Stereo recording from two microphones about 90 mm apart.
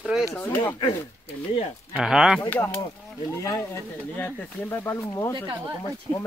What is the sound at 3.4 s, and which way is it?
Speech, 40° left (ahead or behind).